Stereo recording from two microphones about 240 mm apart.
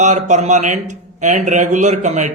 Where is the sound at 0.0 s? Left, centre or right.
Right.